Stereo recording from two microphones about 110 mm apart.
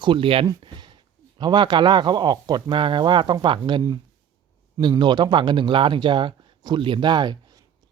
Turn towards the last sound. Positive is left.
turn(degrees=-40)  # may be behind; listen again after turning